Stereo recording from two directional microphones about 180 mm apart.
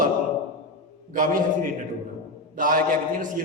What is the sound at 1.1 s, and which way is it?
A man's voice, 50° right (ahead or behind).